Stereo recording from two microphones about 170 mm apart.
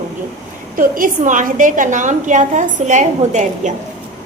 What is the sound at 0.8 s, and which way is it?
A woman's voice, 55° right (ahead or behind).